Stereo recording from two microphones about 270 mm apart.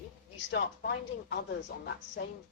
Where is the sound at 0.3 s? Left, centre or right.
Left.